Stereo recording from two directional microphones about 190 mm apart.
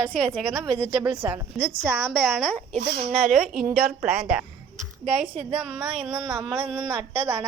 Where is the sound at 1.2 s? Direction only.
10° right (ahead or behind).